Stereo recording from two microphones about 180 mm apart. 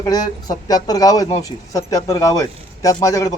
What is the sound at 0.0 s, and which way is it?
A man's voice, 20° left (ahead or behind).